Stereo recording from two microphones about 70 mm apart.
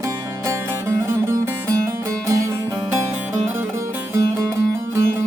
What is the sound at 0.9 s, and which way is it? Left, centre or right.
Music, right.